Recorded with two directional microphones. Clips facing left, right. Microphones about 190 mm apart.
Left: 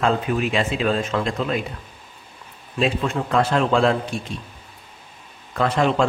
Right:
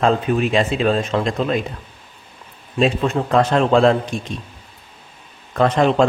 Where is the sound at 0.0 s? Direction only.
35° right (ahead or behind).